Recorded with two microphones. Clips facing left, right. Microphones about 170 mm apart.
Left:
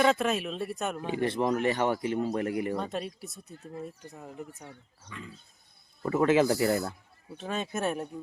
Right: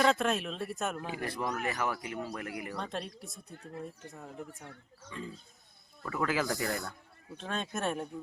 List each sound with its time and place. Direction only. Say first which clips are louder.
0.0 s speech: left 3 dB; centre (ahead or behind)
1.0 s speech: left 8 dB; 25° left (ahead or behind)
2.7 s speech: left 5 dB; 5° left (ahead or behind)
5.1 s wild animals: right 2 dB; 30° right (ahead or behind)
6.0 s speech: left 9 dB; 25° left (ahead or behind)
7.3 s speech: left 4 dB; 5° left (ahead or behind)